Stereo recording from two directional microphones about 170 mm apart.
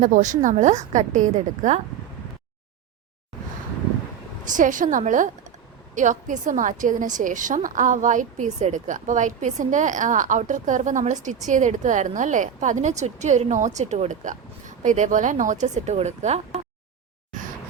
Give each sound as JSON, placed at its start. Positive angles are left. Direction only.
{"t": 0.0, "sound": "a woman's voice", "side_deg": -50}
{"t": 4.4, "sound": "a woman's voice", "side_deg": -50}